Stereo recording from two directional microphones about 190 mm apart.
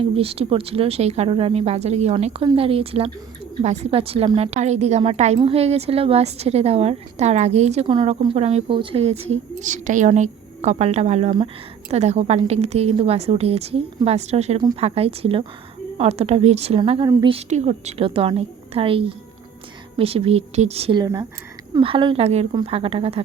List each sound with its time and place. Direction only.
0.0 s a woman's voice: 30° right (ahead or behind)
9.6 s a woman's voice: 40° right (ahead or behind)
21.0 s a woman's voice: 20° right (ahead or behind)